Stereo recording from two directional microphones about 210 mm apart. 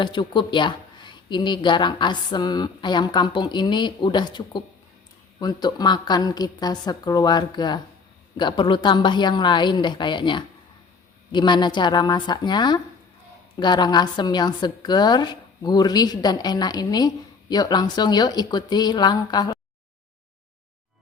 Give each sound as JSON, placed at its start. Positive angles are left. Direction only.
{"t": 0.0, "sound": "speech", "side_deg": 20}